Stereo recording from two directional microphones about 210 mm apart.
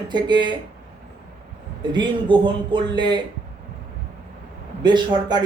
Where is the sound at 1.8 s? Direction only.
20° right (ahead or behind).